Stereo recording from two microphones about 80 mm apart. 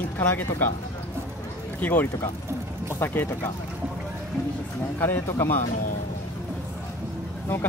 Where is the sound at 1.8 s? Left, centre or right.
Left.